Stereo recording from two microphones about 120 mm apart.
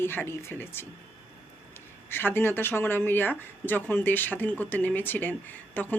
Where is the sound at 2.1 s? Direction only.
15° left (ahead or behind).